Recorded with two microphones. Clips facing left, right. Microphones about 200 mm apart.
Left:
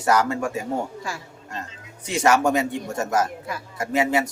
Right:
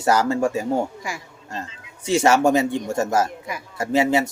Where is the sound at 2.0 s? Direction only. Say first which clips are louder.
Right 3 dB; 25° right (ahead or behind).